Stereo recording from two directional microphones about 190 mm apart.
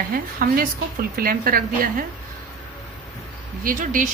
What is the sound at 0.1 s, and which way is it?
A woman's voice, 50° right (ahead or behind).